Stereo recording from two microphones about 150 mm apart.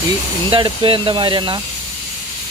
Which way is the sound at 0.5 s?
35° right (ahead or behind).